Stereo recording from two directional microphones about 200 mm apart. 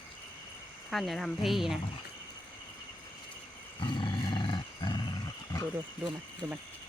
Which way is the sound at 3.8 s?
25° left (ahead or behind).